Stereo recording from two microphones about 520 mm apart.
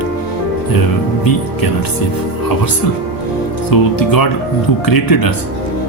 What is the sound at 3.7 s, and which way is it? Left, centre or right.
Speech, left.